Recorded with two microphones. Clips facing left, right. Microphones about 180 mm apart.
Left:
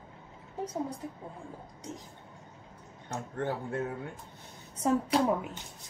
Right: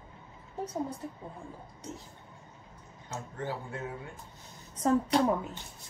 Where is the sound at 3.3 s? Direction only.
55° left (ahead or behind).